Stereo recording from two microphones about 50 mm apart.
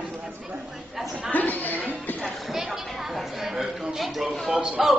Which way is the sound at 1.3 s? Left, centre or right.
Left.